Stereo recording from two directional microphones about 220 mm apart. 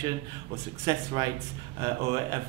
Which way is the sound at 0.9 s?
20° right (ahead or behind).